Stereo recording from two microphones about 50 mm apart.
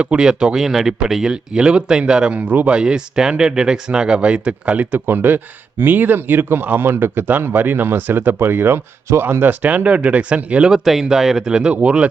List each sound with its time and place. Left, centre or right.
0.0 s speech: centre
5.0 s speech: right
10.7 s speech: centre; by 12.0 s right